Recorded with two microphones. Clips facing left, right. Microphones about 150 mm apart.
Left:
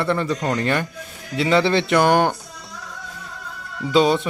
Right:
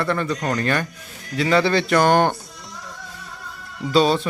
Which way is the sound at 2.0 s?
10° left (ahead or behind).